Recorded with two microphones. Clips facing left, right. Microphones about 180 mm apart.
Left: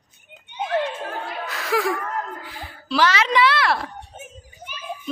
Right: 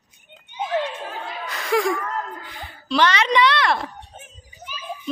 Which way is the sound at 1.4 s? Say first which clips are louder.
Right 2 dB; centre (ahead or behind).